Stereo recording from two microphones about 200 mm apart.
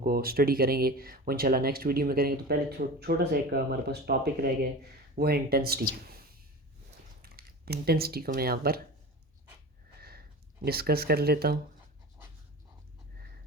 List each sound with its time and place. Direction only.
0.0 s speech: 45° right (ahead or behind)
7.2 s speech: 50° right (ahead or behind)
10.6 s speech: 50° right (ahead or behind)